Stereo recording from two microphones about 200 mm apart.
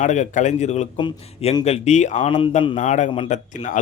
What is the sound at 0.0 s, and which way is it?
Speech, 35° left (ahead or behind).